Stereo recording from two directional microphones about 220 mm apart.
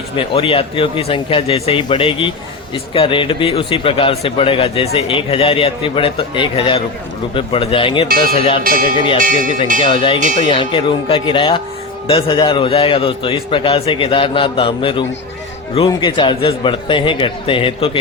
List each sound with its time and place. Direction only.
0.3 s speech: 25° left (ahead or behind)
8.1 s speech: 40° right (ahead or behind)
8.4 s speech: 25° left (ahead or behind)
8.6 s speech: 40° right (ahead or behind)
9.8 s speech: 25° left (ahead or behind)
10.2 s speech: 35° right (ahead or behind)
10.4 s speech: 25° left (ahead or behind)